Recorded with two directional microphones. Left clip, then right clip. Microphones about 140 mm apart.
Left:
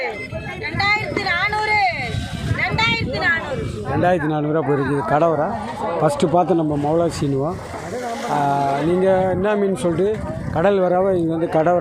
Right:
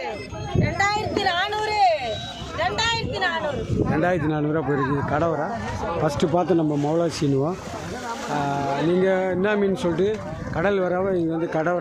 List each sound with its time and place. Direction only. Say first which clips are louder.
0.6 s a sound: left 3 dB; 45° right (ahead or behind)
4.0 s speech: left 8 dB; centre (ahead or behind)
8.3 s speech: left 6 dB; centre (ahead or behind)